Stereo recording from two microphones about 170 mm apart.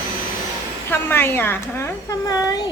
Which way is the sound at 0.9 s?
10° left (ahead or behind).